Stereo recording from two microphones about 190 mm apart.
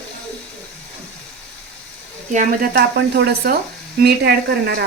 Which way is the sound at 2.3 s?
40° right (ahead or behind).